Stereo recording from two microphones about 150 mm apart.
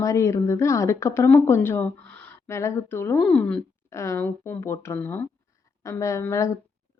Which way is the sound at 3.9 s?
20° left (ahead or behind).